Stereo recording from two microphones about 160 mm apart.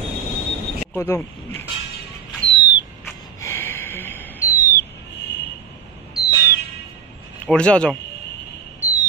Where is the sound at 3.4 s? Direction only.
15° left (ahead or behind).